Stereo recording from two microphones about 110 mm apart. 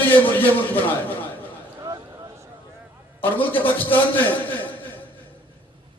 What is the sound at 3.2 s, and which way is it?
A man's voice, 15° left (ahead or behind).